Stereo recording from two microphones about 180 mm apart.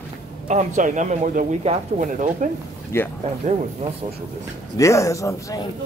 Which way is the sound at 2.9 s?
15° left (ahead or behind).